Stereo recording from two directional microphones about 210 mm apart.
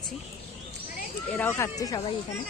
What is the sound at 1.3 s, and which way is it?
Speech, 10° left (ahead or behind).